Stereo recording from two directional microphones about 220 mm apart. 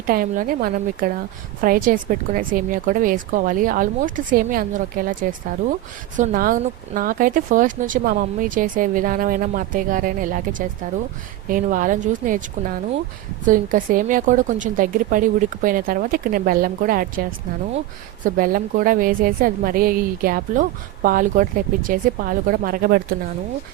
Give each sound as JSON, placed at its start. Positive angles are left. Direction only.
{"t": 0.1, "sound": "speech", "side_deg": -40}
{"t": 6.1, "sound": "speech", "side_deg": -35}
{"t": 13.4, "sound": "speech", "side_deg": -35}